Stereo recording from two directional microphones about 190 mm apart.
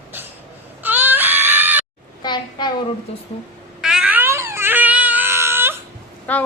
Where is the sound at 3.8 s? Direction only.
5° right (ahead or behind).